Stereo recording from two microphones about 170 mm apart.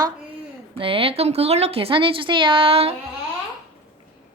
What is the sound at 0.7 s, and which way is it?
Speech, 30° right (ahead or behind).